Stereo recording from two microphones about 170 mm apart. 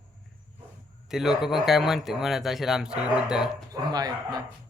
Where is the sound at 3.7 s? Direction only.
25° right (ahead or behind).